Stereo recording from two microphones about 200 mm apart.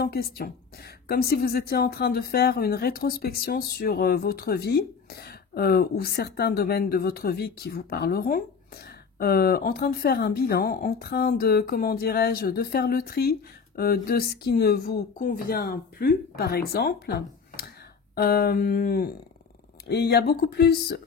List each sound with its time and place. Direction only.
0.0 s speech: 50° left (ahead or behind)